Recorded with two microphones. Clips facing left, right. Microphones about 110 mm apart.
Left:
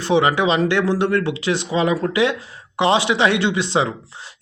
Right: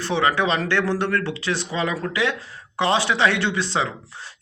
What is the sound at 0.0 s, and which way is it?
Speech, 20° left (ahead or behind).